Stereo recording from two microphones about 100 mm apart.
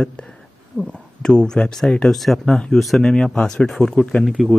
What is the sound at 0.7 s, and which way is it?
Speech, 10° left (ahead or behind).